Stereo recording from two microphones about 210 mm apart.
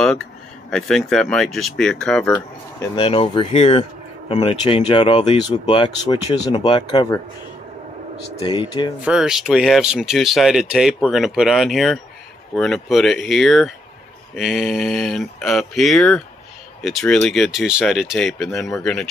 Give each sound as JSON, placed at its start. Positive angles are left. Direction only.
{"t": 0.7, "sound": "speech", "side_deg": 5}
{"t": 2.8, "sound": "speech", "side_deg": 25}
{"t": 8.4, "sound": "speech", "side_deg": 20}
{"t": 9.0, "sound": "speech", "side_deg": -5}